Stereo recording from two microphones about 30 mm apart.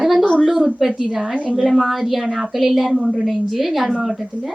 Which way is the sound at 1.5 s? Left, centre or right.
Centre.